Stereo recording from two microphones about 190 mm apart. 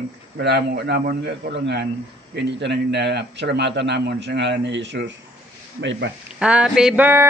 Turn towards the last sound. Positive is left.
turn(degrees=-10)  # may be behind; listen again after turning